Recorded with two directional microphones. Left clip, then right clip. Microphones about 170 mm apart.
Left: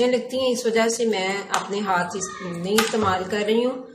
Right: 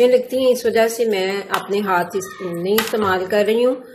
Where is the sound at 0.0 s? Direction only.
40° right (ahead or behind).